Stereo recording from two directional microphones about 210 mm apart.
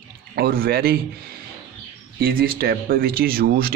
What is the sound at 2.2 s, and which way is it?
A man's voice, 45° right (ahead or behind).